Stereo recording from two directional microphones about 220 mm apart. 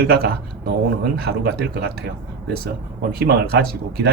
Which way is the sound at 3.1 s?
45° right (ahead or behind).